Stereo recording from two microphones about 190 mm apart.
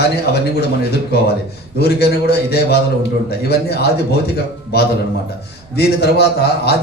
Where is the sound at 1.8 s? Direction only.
55° left (ahead or behind).